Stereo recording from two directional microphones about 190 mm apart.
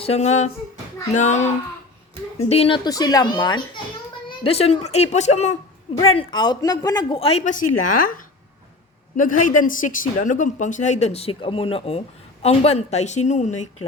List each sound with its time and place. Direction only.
0.0 s speech: 35° left (ahead or behind)
6.1 s speech: 25° left (ahead or behind)
9.1 s speech: 45° left (ahead or behind)